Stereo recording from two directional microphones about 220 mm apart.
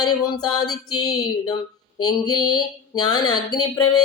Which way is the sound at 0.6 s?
85° left.